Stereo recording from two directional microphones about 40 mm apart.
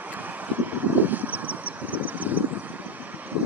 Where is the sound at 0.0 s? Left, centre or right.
Right.